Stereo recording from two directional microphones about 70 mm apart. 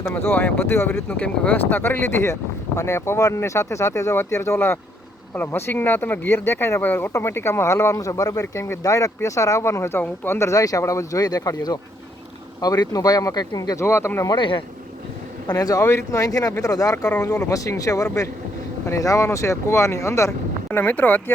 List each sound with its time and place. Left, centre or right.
0.1 s speech: left
1.0 s speech: left
10.6 s speech: left
13.7 s speech: left
15.5 s speech: left
15.8 s speech: left
20.7 s speech: left